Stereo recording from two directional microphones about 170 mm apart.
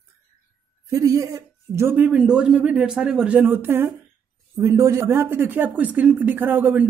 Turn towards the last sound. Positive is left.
turn(degrees=-10)  # may be behind; listen again after turning